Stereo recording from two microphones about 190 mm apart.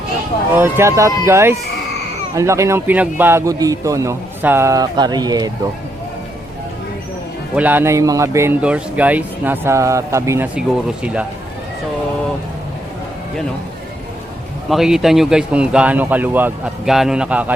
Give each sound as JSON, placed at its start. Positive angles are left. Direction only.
{"t": 0.5, "sound": "a man's voice", "side_deg": -10}
{"t": 7.5, "sound": "a man's voice", "side_deg": -10}
{"t": 14.7, "sound": "speech", "side_deg": 0}